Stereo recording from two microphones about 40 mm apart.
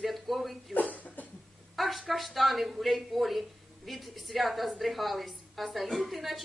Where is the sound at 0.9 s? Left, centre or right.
Left.